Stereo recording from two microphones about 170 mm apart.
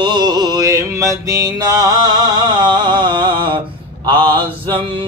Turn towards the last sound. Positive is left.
turn(degrees=-25)  # may be behind; listen again after turning